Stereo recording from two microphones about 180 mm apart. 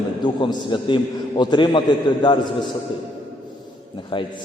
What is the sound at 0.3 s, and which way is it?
A man's voice, 25° left (ahead or behind).